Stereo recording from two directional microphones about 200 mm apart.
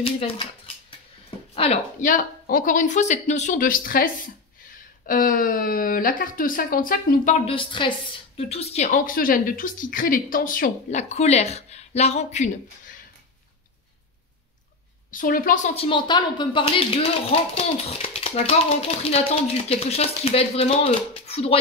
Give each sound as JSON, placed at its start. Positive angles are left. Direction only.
{"t": 0.0, "sound": "a sound", "side_deg": 30}
{"t": 1.5, "sound": "speech", "side_deg": 30}
{"t": 15.0, "sound": "a woman's voice", "side_deg": 45}